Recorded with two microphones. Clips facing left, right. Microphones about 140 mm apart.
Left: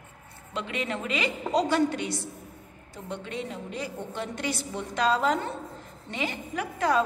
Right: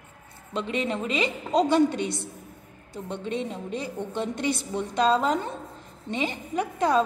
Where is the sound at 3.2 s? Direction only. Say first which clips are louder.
Right 7 dB; 25° right (ahead or behind).